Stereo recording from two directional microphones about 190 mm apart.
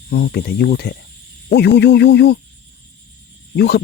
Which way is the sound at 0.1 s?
60° left (ahead or behind).